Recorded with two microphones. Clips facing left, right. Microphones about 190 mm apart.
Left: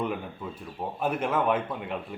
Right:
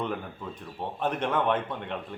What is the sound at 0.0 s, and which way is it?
A man's voice, 10° left (ahead or behind).